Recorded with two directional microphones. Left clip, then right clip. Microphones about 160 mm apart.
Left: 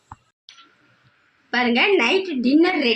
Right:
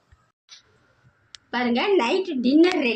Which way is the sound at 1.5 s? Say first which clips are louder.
Left 4 dB; 40° left (ahead or behind).